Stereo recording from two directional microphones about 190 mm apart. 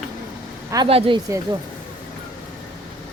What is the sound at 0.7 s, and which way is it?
Speech, 25° right (ahead or behind).